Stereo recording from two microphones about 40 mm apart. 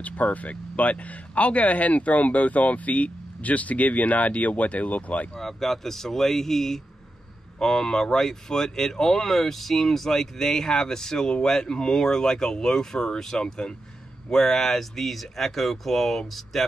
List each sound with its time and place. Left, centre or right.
0.0 s speech: left
5.4 s speech: centre